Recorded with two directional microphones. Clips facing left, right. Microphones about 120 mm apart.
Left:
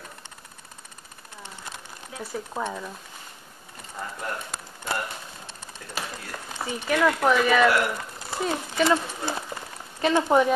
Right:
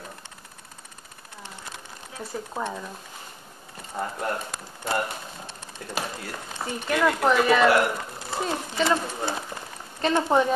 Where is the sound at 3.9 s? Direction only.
30° right (ahead or behind).